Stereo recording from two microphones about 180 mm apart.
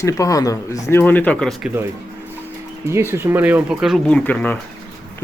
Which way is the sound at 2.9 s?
15° right (ahead or behind).